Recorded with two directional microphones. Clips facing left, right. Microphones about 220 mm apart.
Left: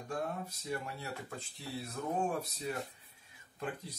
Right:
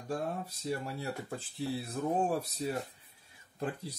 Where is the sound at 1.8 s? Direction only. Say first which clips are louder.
Right 2 dB; 35° right (ahead or behind).